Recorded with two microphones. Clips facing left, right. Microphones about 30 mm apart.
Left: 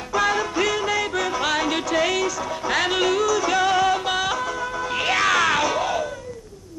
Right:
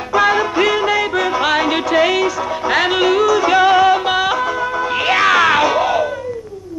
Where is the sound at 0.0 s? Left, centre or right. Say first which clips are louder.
Right 7 dB; right.